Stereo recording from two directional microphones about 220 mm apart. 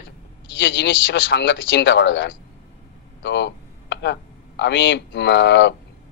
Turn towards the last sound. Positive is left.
turn(degrees=50)  # may be behind; listen again after turning